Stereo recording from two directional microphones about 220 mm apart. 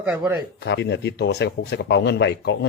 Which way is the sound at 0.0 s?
5° right (ahead or behind).